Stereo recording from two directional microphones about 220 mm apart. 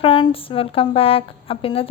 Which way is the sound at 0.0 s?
25° left (ahead or behind).